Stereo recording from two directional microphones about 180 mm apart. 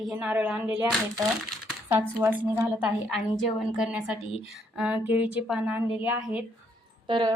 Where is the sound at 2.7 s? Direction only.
5° right (ahead or behind).